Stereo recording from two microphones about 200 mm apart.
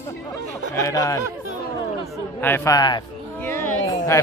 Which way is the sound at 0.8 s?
15° left (ahead or behind).